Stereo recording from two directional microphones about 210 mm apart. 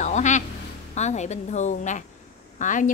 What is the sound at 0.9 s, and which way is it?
A woman's voice, 35° left (ahead or behind).